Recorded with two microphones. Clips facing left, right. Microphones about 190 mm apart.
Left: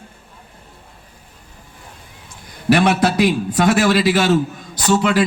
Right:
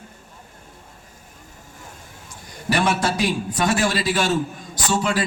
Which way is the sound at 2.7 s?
60° left (ahead or behind).